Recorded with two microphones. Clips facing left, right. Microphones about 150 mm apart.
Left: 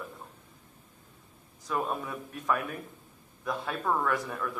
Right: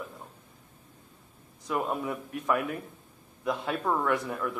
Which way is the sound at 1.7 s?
20° right (ahead or behind).